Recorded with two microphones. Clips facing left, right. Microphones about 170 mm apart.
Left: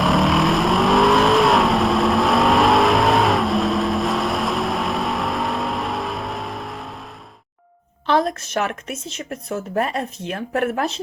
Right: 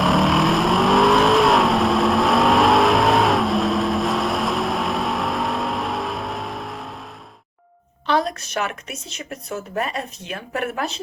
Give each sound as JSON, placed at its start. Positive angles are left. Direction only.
{"t": 0.0, "sound": "vehicle", "side_deg": 0}
{"t": 8.2, "sound": "a woman's voice", "side_deg": 50}